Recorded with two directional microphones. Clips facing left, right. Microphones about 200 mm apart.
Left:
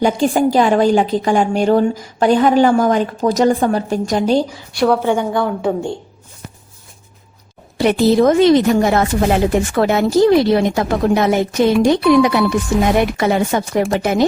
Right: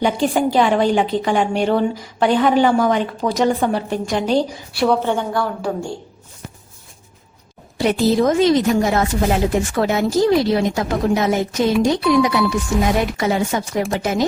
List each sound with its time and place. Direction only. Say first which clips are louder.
0.0 s a woman's voice: left 3 dB; 45° left (ahead or behind)
5.0 s a woman's voice: left 4 dB; 15° left (ahead or behind)
7.8 s a woman's voice: left 4 dB; 65° left (ahead or behind)